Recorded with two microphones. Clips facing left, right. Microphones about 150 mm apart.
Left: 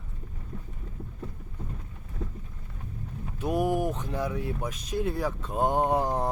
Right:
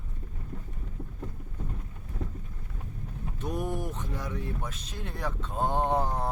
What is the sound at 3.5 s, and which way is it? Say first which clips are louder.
Speech: left 7 dB; 85° left.